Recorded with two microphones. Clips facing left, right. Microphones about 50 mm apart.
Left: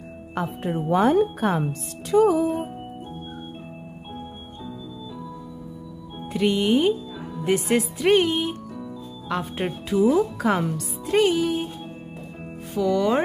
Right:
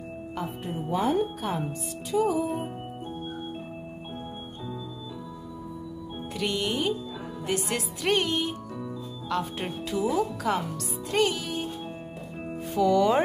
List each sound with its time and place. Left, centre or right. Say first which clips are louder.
0.3 s a woman's voice: left 7 dB; left
6.3 s speech: left 8 dB; centre
12.7 s speech: even; centre